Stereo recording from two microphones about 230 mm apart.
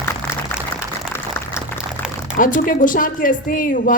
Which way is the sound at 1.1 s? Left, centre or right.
Centre.